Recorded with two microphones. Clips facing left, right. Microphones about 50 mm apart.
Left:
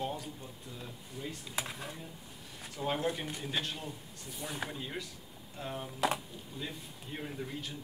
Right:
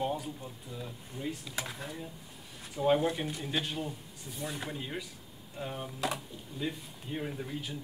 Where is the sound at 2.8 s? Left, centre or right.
Centre.